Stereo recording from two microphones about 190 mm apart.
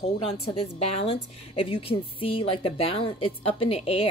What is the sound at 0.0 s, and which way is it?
A woman's voice, 30° left (ahead or behind).